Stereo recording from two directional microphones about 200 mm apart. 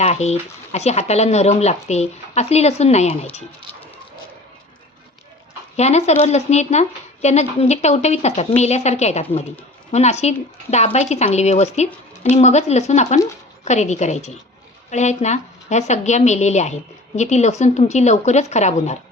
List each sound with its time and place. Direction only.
0.0 s speech: 30° left (ahead or behind)
5.7 s speech: 35° left (ahead or behind)